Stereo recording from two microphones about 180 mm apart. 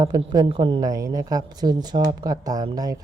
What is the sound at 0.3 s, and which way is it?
Speech, 25° right (ahead or behind).